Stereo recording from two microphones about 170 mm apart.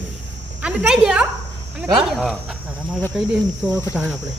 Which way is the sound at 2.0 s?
5° right (ahead or behind).